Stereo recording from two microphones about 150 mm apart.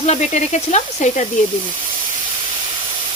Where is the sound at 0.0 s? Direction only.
50° left (ahead or behind).